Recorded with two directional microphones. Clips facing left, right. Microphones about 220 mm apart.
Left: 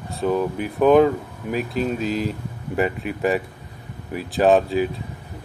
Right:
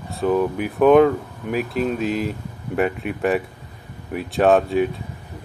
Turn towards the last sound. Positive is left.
turn(degrees=0)  # may be behind; listen again after turning